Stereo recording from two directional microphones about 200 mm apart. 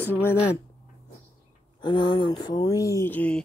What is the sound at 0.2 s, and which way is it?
Speech, 10° left (ahead or behind).